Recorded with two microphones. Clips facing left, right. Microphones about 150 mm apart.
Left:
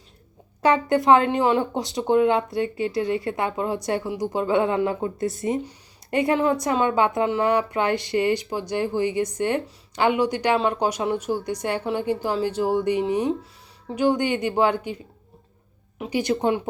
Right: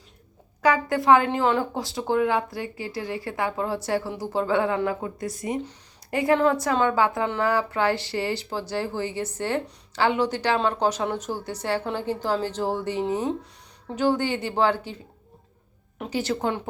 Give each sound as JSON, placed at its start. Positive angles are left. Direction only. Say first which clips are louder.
{"t": 0.6, "sound": "speech", "louder": "left 2 dB", "side_deg": 25}
{"t": 16.0, "sound": "speech", "louder": "left 3 dB", "side_deg": 15}